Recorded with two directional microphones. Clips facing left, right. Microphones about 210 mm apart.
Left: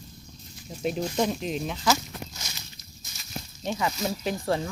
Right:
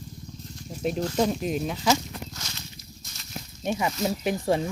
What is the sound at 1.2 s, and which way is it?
Speech, 5° right (ahead or behind).